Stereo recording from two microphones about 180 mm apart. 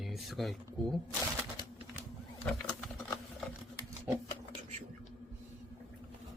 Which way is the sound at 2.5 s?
5° left (ahead or behind).